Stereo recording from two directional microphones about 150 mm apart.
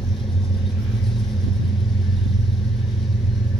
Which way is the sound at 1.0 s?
Centre (ahead or behind).